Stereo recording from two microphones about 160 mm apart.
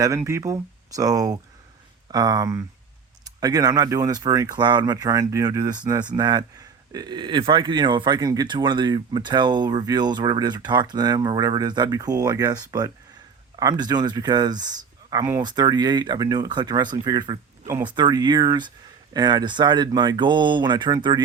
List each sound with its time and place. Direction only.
0.2 s speech: 15° right (ahead or behind)